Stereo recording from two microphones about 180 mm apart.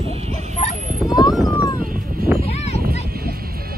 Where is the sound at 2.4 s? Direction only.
35° left (ahead or behind).